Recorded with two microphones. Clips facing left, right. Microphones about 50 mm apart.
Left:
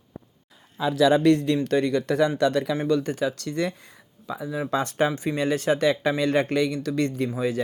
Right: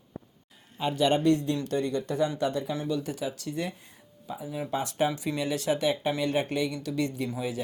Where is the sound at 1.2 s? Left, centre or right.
Left.